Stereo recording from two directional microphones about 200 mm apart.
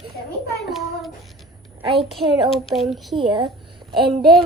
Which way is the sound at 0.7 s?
Centre (ahead or behind).